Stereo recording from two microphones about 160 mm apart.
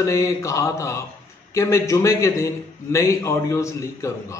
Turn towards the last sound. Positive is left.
turn(degrees=20)  # may be behind; listen again after turning